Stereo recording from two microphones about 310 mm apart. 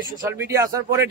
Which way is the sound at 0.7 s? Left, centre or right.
Centre.